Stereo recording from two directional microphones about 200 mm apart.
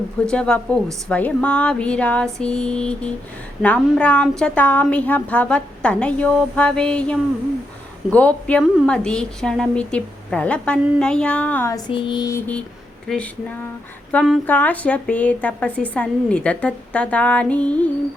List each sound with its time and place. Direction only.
0.3 s a woman's voice: 5° left (ahead or behind)
11.9 s a sound: 25° left (ahead or behind)
13.1 s a woman's voice: 5° left (ahead or behind)